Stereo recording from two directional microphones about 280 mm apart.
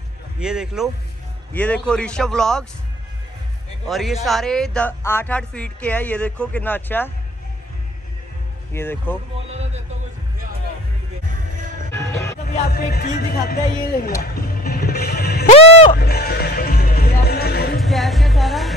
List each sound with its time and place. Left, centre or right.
0.4 s speech: centre
3.8 s speech: centre
8.7 s speech: centre
11.9 s music: centre
12.4 s speech: left
14.6 s music: left
15.5 s music: left
16.0 s music: left
17.7 s a sound: centre